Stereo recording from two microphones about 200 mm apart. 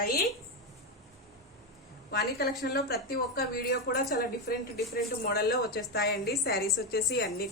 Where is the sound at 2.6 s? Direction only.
55° left (ahead or behind).